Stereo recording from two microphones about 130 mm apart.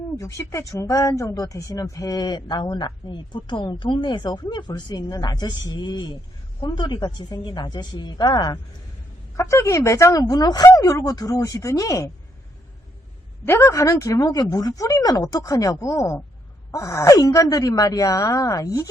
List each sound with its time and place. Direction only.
0.2 s speech: 25° left (ahead or behind)
13.4 s speech: 20° left (ahead or behind)